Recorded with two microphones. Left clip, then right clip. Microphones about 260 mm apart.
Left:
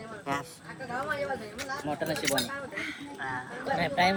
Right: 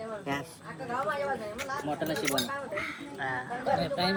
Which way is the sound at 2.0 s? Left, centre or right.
Centre.